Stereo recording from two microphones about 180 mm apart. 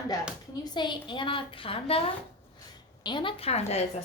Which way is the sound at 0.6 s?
25° left (ahead or behind).